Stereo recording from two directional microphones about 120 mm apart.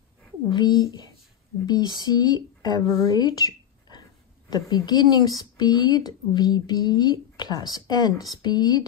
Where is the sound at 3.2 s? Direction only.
30° left (ahead or behind).